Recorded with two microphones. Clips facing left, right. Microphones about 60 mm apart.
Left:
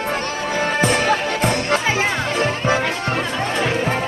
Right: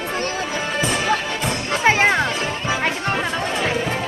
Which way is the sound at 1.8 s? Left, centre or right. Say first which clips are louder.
Right 4 dB; right.